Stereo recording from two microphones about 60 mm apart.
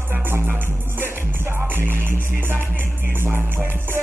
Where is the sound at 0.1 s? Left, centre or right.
Right.